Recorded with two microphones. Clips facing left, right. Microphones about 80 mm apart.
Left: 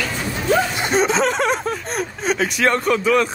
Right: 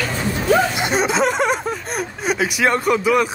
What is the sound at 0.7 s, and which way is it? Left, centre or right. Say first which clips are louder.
Speech: left 1 dB; centre.